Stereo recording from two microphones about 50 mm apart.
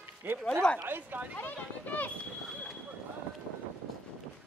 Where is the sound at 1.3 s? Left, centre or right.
Left.